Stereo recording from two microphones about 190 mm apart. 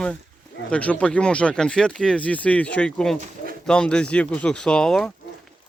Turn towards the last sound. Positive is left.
turn(degrees=5)  # may be behind; listen again after turning